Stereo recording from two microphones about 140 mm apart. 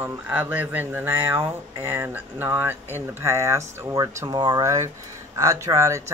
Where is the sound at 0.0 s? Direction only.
15° right (ahead or behind).